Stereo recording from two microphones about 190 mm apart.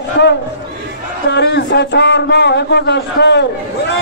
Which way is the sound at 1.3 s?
65° left (ahead or behind).